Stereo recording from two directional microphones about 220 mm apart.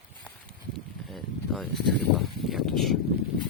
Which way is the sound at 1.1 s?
Centre (ahead or behind).